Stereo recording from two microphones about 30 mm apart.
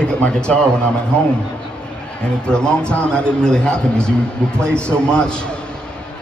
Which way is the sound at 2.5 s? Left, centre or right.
Left.